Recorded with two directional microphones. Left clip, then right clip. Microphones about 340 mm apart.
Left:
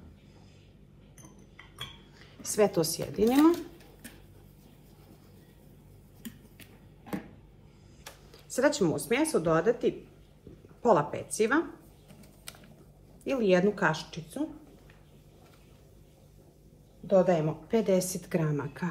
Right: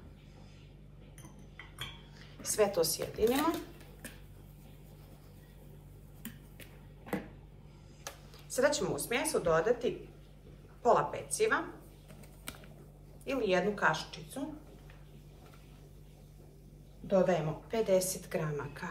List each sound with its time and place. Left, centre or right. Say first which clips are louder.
2.1 s speech: left 3 dB; centre
8.5 s a woman's voice: left 4 dB; centre
13.2 s a woman's voice: left 5 dB; centre
17.1 s a woman's voice: left 5 dB; centre